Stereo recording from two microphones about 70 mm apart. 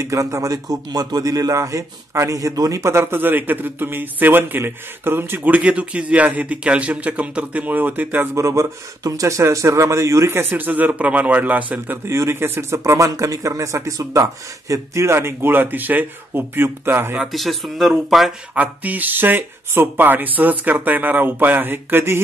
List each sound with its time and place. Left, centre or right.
0.0 s a man's voice: right
2.8 s a man's voice: right
8.4 s speech: right
12.1 s speech: right
12.7 s speech: right
17.2 s speech: centre
18.5 s a man's voice: right